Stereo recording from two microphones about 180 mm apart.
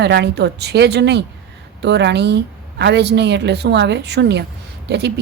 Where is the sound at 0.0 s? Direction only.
70° right (ahead or behind).